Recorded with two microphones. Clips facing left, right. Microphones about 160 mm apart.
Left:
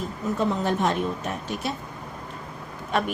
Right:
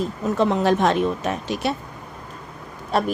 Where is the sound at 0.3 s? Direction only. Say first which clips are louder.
Right 6 dB; 85° right.